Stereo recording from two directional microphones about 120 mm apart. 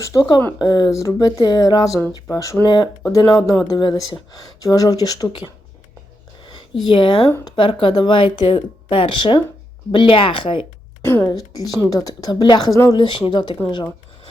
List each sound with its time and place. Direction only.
0.0 s speech: 30° left (ahead or behind)
6.8 s speech: 40° left (ahead or behind)
11.0 s a woman's voice: 20° left (ahead or behind)
11.3 s speech: 30° left (ahead or behind)
13.0 s speech: 40° left (ahead or behind)